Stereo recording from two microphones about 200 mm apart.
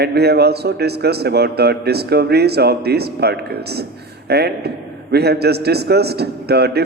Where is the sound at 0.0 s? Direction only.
55° right (ahead or behind).